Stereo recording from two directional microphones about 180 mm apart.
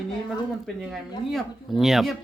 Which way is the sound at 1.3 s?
Centre (ahead or behind).